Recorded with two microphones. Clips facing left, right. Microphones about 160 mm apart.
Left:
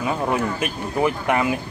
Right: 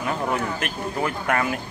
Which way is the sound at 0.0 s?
10° left (ahead or behind).